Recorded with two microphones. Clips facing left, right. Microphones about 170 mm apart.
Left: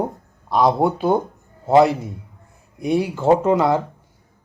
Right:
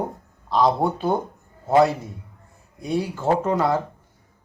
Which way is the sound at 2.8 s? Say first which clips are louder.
Left 5 dB; 15° left (ahead or behind).